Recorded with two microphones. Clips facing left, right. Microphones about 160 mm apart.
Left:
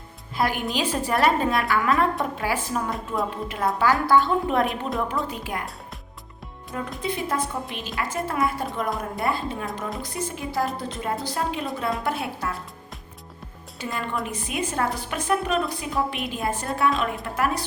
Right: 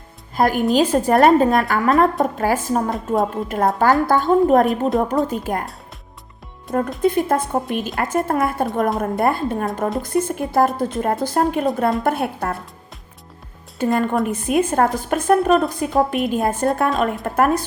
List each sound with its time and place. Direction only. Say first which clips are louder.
0.3 s a woman's voice: right 9 dB; 45° right (ahead or behind)
7.0 s a woman's voice: right 8 dB; 50° right (ahead or behind)
13.7 s a woman's voice: right 11 dB; 45° right (ahead or behind)